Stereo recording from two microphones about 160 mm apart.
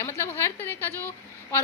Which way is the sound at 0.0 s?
15° left (ahead or behind).